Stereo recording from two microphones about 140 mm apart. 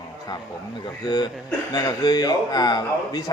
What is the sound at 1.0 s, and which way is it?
A man's voice, 35° left (ahead or behind).